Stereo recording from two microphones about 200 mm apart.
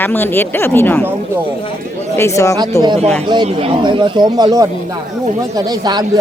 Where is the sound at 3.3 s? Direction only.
25° right (ahead or behind).